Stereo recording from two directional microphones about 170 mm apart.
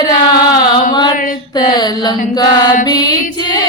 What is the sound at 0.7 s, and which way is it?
Mantra, 25° left (ahead or behind).